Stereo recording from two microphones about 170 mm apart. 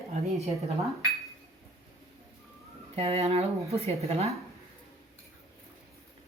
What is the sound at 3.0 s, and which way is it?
Speech, 40° right (ahead or behind).